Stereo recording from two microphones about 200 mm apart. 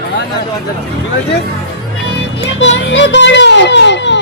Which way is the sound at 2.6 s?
65° left (ahead or behind).